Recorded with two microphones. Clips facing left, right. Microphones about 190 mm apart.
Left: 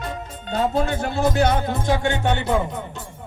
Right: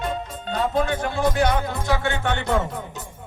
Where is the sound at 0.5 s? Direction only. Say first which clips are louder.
Left 1 dB; 30° left (ahead or behind); by 2.7 s 10° left (ahead or behind).